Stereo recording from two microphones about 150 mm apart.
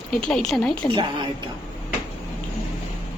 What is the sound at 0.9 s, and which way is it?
Speech, 30° right (ahead or behind).